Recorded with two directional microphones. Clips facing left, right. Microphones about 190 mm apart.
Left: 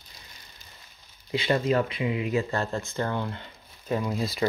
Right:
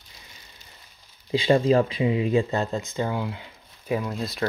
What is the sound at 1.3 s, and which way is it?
Speech, 30° right (ahead or behind).